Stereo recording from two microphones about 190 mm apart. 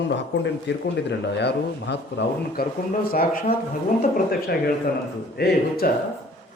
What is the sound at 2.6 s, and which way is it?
Speech, 55° left (ahead or behind).